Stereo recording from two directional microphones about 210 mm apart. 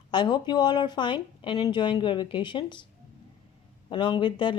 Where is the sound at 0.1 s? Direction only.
20° left (ahead or behind).